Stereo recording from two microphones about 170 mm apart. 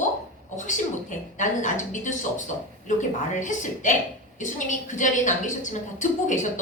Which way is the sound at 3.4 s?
45° left (ahead or behind).